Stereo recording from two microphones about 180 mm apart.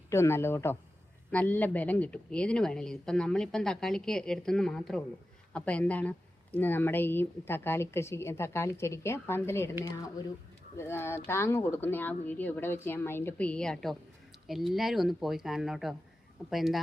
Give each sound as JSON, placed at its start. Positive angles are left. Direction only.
{"t": 0.1, "sound": "speech", "side_deg": 15}
{"t": 10.8, "sound": "speech", "side_deg": 15}